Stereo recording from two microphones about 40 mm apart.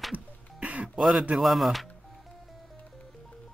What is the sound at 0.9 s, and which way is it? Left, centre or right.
Speech, centre.